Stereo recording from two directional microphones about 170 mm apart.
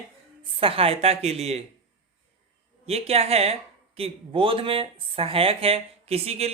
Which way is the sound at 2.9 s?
35° right (ahead or behind).